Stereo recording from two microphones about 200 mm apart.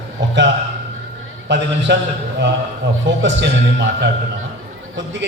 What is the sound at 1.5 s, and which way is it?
Speech, 60° right (ahead or behind).